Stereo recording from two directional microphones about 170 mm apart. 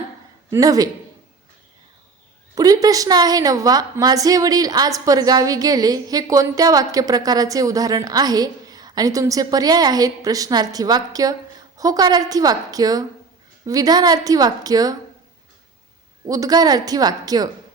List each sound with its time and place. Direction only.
0.5 s a woman's voice: 20° right (ahead or behind)
2.6 s a woman's voice: 20° right (ahead or behind)
16.2 s a woman's voice: 20° right (ahead or behind)